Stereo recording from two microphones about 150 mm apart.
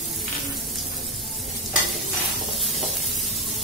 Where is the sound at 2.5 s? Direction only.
Centre (ahead or behind).